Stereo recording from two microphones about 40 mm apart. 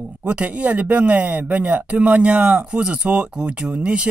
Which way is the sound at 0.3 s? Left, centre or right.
Right.